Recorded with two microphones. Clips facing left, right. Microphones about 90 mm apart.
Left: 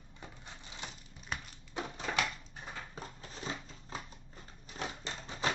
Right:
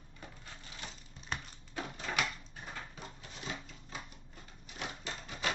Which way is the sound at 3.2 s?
35° left (ahead or behind).